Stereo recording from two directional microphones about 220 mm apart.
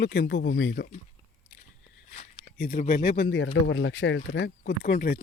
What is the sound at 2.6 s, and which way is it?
Speech, 40° left (ahead or behind).